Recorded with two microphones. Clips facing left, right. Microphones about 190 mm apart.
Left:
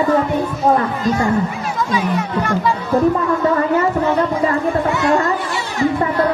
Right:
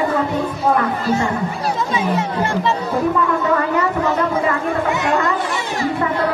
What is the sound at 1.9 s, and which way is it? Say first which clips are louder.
Speech: left 1 dB; 25° right (ahead or behind).